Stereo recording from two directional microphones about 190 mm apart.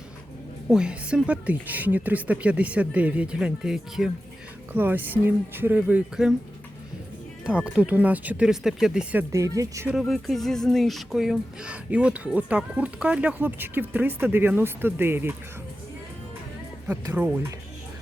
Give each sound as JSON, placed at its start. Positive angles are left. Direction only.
{"t": 0.7, "sound": "speech", "side_deg": -5}
{"t": 7.4, "sound": "speech", "side_deg": -5}
{"t": 9.3, "sound": "speech", "side_deg": -15}
{"t": 9.9, "sound": "speech", "side_deg": 0}
{"t": 16.9, "sound": "speech", "side_deg": -10}